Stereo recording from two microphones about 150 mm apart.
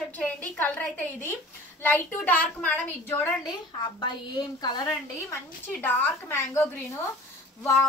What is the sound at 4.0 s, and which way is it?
Speech, 30° left (ahead or behind).